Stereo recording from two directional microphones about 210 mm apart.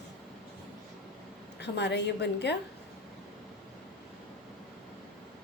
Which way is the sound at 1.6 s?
55° left (ahead or behind).